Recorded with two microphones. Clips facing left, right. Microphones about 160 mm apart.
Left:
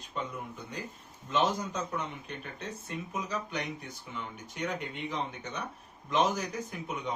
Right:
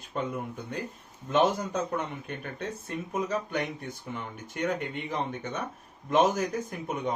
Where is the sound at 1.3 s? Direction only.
55° right (ahead or behind).